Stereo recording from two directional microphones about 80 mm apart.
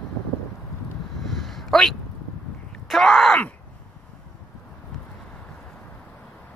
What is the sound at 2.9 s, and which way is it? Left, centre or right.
Groan, centre.